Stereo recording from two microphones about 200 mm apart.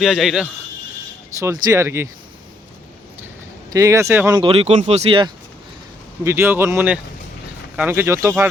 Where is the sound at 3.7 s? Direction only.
15° right (ahead or behind).